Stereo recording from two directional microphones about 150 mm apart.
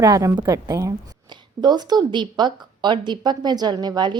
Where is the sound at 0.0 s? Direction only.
25° right (ahead or behind).